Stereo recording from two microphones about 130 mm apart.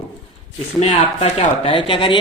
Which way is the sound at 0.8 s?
55° left (ahead or behind).